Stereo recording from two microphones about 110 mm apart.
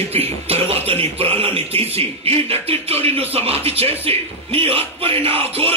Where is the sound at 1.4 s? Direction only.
60° right (ahead or behind).